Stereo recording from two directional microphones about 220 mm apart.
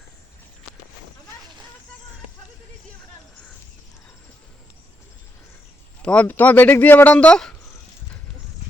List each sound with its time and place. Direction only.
6.0 s speech: 5° left (ahead or behind)